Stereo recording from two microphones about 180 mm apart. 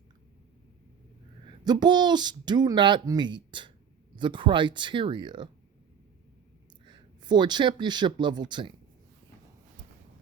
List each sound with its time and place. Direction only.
1.6 s speech: 25° right (ahead or behind)
6.8 s speech: 25° right (ahead or behind)